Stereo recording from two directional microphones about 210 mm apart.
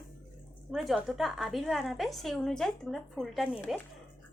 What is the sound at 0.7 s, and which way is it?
A woman's voice, centre (ahead or behind).